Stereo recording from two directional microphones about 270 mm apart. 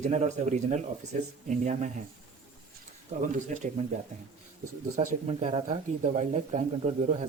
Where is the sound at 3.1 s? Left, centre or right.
Right.